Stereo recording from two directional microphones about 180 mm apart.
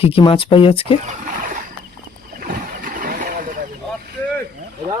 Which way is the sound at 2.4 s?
50° right (ahead or behind).